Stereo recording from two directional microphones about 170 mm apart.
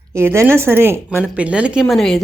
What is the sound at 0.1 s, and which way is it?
A woman's voice, 15° right (ahead or behind).